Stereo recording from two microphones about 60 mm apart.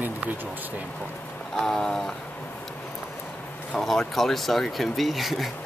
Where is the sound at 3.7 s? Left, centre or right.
Centre.